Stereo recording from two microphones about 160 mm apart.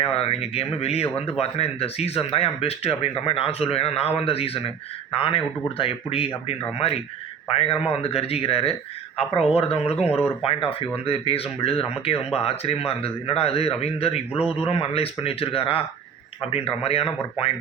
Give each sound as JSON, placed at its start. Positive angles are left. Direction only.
{"t": 0.0, "sound": "speech", "side_deg": 40}